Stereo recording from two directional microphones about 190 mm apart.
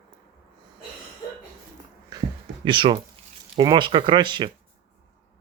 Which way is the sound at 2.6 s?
25° right (ahead or behind).